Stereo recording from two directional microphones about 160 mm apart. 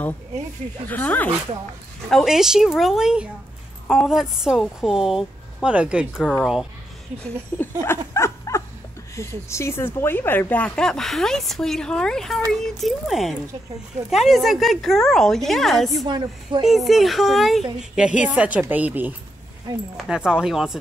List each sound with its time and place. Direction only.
0.8 s speech: 10° left (ahead or behind)
2.0 s speech: centre (ahead or behind)
7.8 s dog: 15° left (ahead or behind)
9.5 s speech: 15° left (ahead or behind); by 16.1 s centre (ahead or behind)
16.1 s speech: 30° right (ahead or behind)
16.6 s a woman's voice: centre (ahead or behind)